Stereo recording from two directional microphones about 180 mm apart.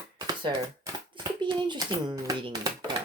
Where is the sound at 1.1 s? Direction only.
25° right (ahead or behind).